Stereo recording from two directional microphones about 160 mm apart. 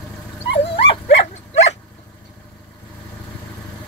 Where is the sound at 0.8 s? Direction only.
40° left (ahead or behind).